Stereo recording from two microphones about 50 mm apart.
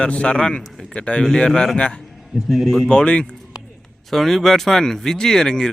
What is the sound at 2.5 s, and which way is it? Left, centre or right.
Speech, centre.